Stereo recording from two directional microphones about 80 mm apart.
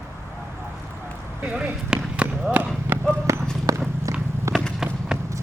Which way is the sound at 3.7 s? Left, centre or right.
Right.